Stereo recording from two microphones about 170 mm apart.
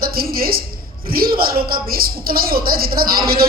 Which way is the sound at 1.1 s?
60° right (ahead or behind).